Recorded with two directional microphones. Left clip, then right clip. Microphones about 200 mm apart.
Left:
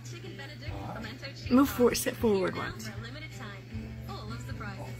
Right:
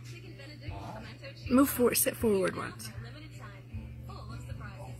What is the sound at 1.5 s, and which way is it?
Speech, 20° right (ahead or behind).